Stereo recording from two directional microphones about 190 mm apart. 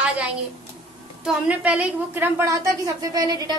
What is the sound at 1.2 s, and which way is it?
A woman's voice, 5° right (ahead or behind).